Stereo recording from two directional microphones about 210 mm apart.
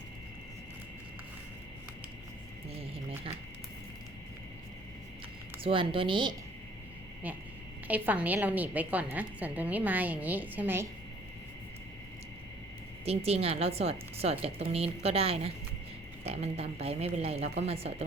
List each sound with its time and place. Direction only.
5.6 s speech: 25° right (ahead or behind)
7.9 s a woman's voice: 5° right (ahead or behind)
13.1 s speech: 30° right (ahead or behind)